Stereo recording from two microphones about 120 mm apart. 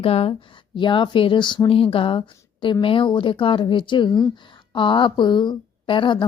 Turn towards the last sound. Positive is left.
turn(degrees=45)  # may be behind; listen again after turning